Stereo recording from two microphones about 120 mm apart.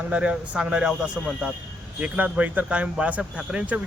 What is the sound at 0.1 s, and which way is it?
Speech, 10° right (ahead or behind).